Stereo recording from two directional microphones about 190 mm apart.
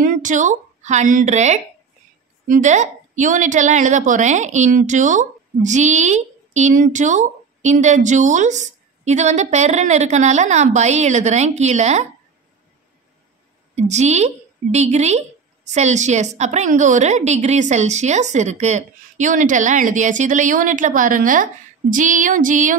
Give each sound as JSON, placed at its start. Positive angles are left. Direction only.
{"t": 0.0, "sound": "a woman's voice", "side_deg": -40}
{"t": 13.7, "sound": "a woman's voice", "side_deg": -35}